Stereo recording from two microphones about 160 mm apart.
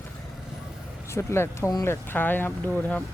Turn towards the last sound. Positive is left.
turn(degrees=5)  # may be behind; listen again after turning